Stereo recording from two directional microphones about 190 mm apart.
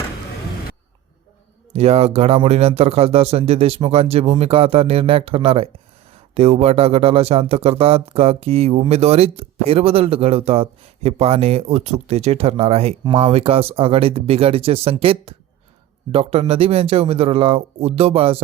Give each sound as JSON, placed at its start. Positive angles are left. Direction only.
{"t": 1.7, "sound": "speech", "side_deg": -35}